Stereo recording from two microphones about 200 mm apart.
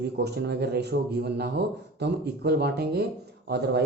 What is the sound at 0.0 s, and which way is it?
Speech, 55° right (ahead or behind).